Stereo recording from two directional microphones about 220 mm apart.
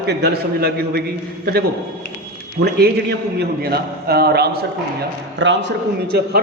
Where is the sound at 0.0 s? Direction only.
50° right (ahead or behind).